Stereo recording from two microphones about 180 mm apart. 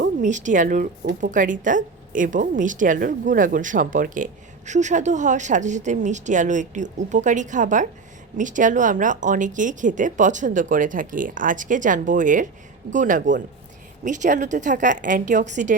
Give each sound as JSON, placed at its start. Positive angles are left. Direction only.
{"t": 0.2, "sound": "a woman's voice", "side_deg": -45}